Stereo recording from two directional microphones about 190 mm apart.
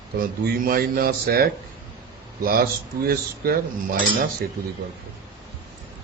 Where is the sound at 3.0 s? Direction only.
55° right (ahead or behind).